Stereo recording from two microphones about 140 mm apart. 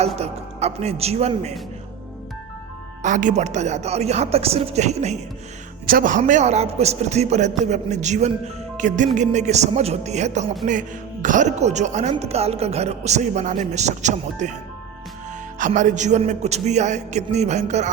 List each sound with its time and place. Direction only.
0.2 s music: 50° right (ahead or behind)
3.0 s music: 65° right (ahead or behind)
5.8 s a man's voice: 80° right; by 10.4 s 55° right (ahead or behind)
10.7 s a man's voice: 65° right (ahead or behind)
15.5 s a man's voice: 65° right (ahead or behind)